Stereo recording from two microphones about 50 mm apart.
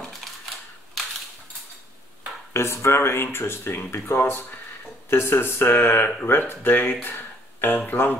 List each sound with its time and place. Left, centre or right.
2.5 s speech: left